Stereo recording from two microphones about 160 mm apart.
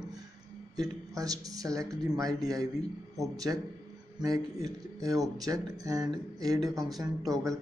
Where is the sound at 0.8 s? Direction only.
20° right (ahead or behind).